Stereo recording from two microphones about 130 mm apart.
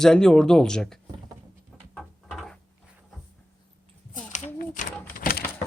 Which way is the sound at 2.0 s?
Centre (ahead or behind).